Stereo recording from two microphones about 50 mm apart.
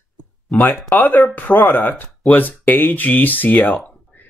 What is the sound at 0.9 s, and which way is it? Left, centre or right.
Speech, left.